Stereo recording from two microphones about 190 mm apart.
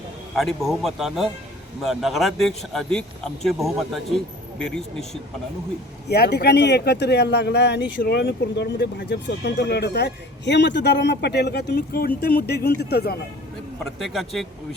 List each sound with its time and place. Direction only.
0.3 s speech: centre (ahead or behind)
6.1 s speech: 60° left (ahead or behind)
14.0 s speech: centre (ahead or behind)